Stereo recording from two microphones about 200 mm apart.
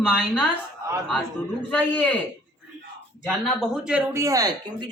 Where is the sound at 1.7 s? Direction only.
5° left (ahead or behind).